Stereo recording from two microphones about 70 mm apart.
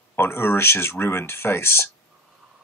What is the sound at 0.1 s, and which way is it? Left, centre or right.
Speech, left.